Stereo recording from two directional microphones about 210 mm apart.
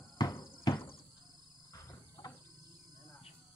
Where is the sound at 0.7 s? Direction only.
20° left (ahead or behind).